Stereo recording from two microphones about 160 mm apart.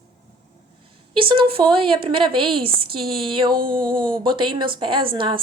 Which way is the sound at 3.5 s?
60° right (ahead or behind).